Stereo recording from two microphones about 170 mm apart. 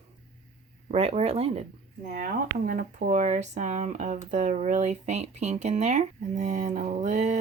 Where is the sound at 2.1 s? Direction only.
50° right (ahead or behind).